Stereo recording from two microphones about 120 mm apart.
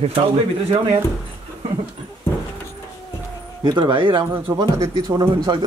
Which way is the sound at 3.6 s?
40° right (ahead or behind).